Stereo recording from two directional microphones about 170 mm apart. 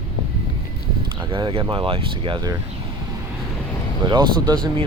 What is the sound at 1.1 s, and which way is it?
Speech, 30° right (ahead or behind).